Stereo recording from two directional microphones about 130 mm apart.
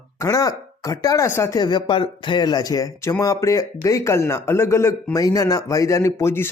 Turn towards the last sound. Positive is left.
turn(degrees=20)  # may be behind; listen again after turning